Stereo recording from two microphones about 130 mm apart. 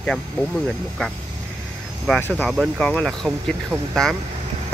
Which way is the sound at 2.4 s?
5° left (ahead or behind).